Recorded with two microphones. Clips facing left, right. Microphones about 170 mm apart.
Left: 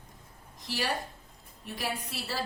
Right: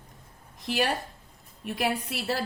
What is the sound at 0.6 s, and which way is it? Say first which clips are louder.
A woman's voice: right 5 dB; 60° right (ahead or behind).